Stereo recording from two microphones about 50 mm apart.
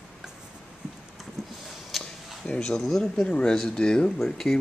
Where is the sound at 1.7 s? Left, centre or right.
Centre.